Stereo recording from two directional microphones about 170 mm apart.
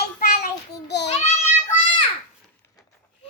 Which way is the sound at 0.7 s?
85° left.